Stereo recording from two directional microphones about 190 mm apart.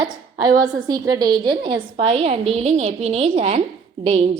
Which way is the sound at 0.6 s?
20° right (ahead or behind).